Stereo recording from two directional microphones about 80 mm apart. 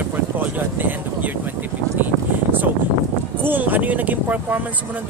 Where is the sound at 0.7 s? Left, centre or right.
Right.